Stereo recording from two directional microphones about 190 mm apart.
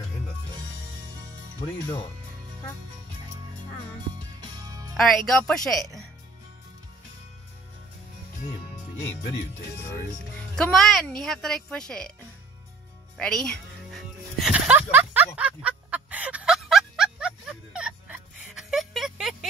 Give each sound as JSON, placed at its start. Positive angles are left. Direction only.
{"t": 4.6, "sound": "music", "side_deg": -20}
{"t": 4.9, "sound": "speech", "side_deg": 0}
{"t": 9.8, "sound": "speech", "side_deg": 5}
{"t": 13.2, "sound": "music", "side_deg": 5}